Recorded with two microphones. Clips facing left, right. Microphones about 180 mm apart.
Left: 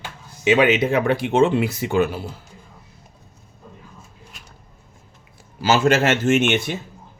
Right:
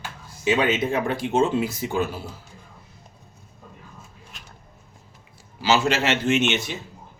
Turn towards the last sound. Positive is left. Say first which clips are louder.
# left 4 dB
turn(degrees=55)  # may be behind; listen again after turning